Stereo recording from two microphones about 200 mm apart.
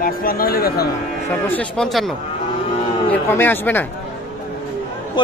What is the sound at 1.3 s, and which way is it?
Speech, 10° left (ahead or behind).